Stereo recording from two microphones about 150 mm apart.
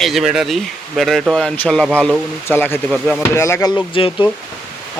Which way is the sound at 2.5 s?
15° left (ahead or behind).